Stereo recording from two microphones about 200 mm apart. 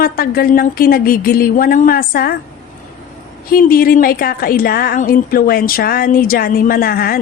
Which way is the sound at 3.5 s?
45° left (ahead or behind).